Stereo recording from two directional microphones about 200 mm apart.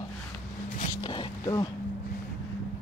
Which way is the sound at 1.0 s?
20° left (ahead or behind).